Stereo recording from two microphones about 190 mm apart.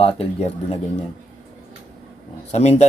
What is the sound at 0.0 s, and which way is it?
Speech, 30° left (ahead or behind).